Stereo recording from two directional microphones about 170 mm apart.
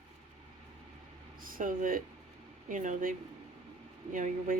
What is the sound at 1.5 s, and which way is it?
Speech, 55° right (ahead or behind).